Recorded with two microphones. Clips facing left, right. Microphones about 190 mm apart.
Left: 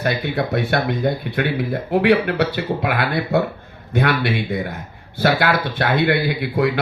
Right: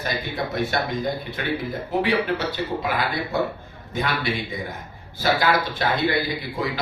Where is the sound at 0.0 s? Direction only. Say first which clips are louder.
Left 6 dB; 60° left (ahead or behind).